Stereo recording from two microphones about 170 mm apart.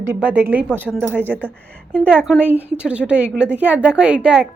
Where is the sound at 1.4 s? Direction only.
5° left (ahead or behind).